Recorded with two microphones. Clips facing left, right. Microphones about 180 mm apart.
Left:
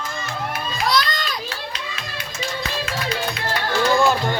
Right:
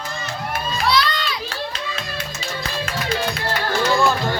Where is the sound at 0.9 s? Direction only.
45° left (ahead or behind).